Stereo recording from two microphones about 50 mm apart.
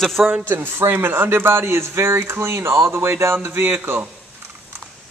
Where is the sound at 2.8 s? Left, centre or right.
Right.